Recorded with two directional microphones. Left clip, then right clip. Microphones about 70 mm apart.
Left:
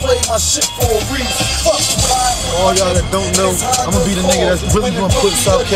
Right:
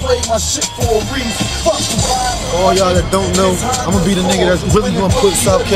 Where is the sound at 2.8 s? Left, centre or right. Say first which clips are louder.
Right 2 dB; centre.